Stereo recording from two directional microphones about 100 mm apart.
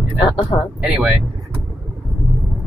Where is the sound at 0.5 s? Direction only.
55° left (ahead or behind).